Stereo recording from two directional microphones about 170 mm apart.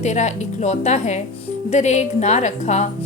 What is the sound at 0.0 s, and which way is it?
A woman's voice, 45° left (ahead or behind).